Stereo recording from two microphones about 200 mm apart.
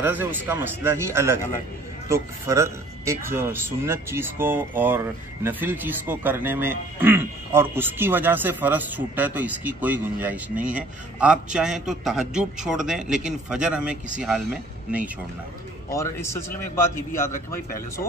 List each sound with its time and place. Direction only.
0.0 s a man's voice: 10° right (ahead or behind)
15.9 s a man's voice: 15° left (ahead or behind)